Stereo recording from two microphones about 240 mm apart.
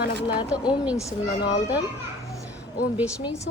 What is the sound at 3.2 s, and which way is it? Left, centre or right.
Speech, centre.